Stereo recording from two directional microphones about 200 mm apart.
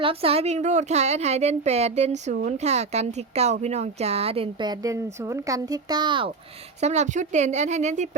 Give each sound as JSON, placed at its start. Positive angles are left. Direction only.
{"t": 0.0, "sound": "a woman's voice", "side_deg": -30}
{"t": 2.3, "sound": "speech", "side_deg": -50}
{"t": 2.6, "sound": "a woman's voice", "side_deg": -30}
{"t": 4.8, "sound": "speech", "side_deg": -15}
{"t": 6.8, "sound": "a woman's voice", "side_deg": -35}